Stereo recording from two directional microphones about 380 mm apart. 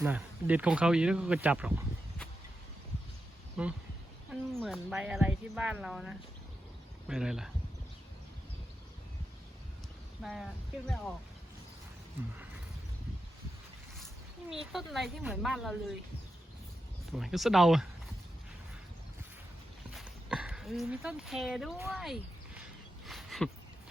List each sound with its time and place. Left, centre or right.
0.0 s a woman's voice: centre
3.6 s a woman's voice: centre
10.2 s a woman's voice: centre
14.5 s a woman's voice: centre
17.1 s a woman's voice: centre
19.9 s speech: centre
23.0 s a sound: centre